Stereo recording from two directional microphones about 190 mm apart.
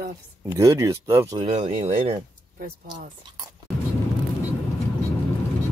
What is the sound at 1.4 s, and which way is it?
Speech, 30° right (ahead or behind).